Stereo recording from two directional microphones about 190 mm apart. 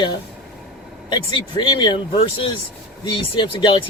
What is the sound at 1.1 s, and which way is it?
Speech, 25° left (ahead or behind).